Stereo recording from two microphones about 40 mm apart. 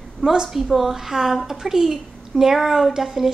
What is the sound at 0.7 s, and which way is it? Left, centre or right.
A woman's voice, centre.